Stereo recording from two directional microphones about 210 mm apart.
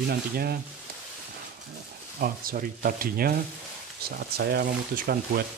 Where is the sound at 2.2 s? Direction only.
45° right (ahead or behind).